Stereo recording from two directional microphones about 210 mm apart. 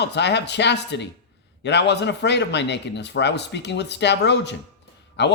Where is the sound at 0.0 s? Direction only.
55° left (ahead or behind).